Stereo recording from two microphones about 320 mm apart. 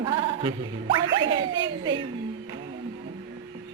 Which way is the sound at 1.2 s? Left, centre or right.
Right.